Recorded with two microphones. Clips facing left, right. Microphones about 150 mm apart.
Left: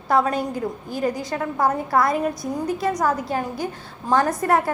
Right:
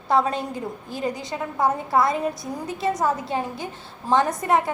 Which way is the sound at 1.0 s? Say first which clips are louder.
Left 3 dB; 20° right (ahead or behind).